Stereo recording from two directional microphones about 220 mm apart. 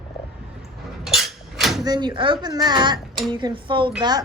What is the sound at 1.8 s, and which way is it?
A woman's voice, 20° right (ahead or behind).